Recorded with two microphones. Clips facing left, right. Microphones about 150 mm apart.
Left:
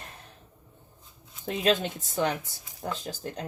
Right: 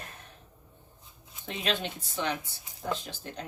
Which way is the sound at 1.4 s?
45° left (ahead or behind).